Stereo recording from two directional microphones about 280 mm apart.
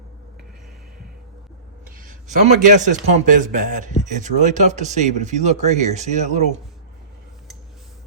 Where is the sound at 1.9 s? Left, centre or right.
Right.